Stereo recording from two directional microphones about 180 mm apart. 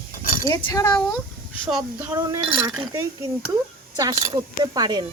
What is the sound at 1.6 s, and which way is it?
Speech, centre (ahead or behind).